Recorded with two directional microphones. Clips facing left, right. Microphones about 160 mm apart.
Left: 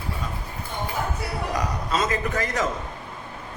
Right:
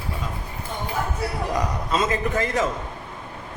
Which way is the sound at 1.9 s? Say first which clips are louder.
Right 2 dB; 25° right (ahead or behind).